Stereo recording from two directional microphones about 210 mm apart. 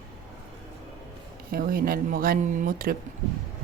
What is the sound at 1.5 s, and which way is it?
Speech, 45° right (ahead or behind).